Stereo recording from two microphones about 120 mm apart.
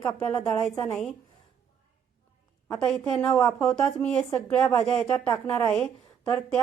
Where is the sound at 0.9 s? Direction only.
5° left (ahead or behind).